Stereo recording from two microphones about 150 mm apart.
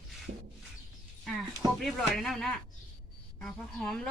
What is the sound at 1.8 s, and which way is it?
Speech, centre (ahead or behind).